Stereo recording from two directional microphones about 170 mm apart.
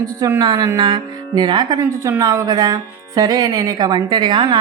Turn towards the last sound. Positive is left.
turn(degrees=-30)  # may be behind; listen again after turning